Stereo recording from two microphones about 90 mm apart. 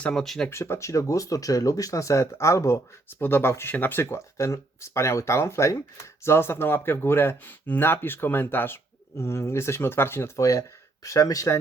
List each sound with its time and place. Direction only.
0.0 s speech: 5° left (ahead or behind)
0.5 s speech: 30° left (ahead or behind)
4.0 s speech: 35° left (ahead or behind)